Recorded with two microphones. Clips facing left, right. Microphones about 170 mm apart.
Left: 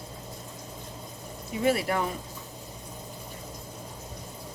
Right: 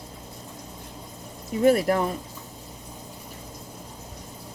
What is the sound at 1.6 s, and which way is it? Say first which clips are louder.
Speech: right 6 dB; 45° right (ahead or behind).